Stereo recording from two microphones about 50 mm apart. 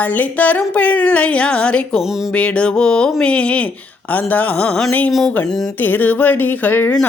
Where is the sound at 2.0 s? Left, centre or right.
Centre.